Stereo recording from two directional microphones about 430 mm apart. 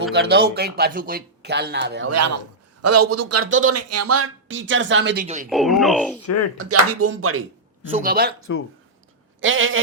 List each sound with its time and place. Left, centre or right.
0.1 s speech: right
5.5 s speech: centre
6.2 s speech: left
6.6 s speech: right
9.4 s speech: right